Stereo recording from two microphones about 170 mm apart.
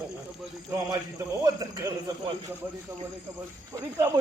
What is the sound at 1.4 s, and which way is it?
Speech, 20° right (ahead or behind).